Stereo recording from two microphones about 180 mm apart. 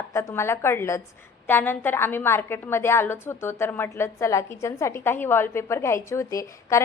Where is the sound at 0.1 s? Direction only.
15° left (ahead or behind).